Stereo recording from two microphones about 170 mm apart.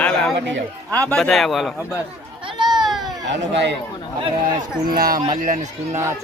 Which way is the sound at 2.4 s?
25° right (ahead or behind).